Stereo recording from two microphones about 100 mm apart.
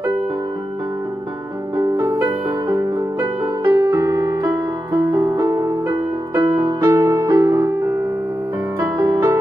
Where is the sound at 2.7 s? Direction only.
35° right (ahead or behind).